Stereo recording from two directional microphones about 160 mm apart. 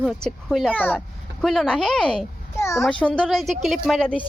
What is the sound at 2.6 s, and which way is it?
Speech, 20° left (ahead or behind).